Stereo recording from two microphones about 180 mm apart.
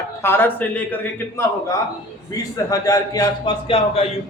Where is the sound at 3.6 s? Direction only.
30° left (ahead or behind).